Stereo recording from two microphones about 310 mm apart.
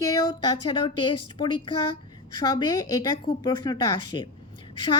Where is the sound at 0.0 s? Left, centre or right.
Centre.